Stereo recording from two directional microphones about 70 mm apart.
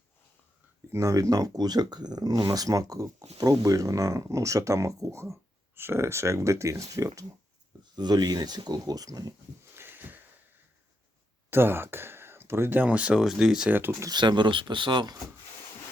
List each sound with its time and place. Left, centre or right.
0.9 s speech: right
7.9 s speech: right
9.7 s a sound: right
11.5 s speech: right; by 13.2 s centre
13.2 s speech: centre
13.7 s speech: right
14.1 s speech: right